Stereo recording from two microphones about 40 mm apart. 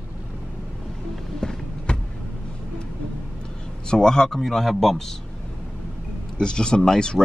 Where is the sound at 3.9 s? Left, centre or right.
Centre.